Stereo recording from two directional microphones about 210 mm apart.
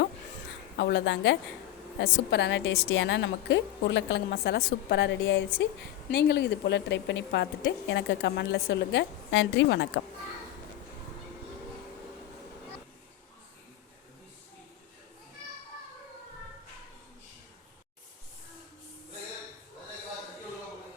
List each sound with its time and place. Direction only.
0.8 s a woman's voice: 55° left (ahead or behind)